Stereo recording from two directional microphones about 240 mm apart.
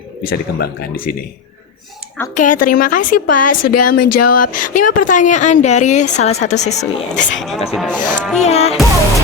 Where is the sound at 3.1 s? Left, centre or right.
Left.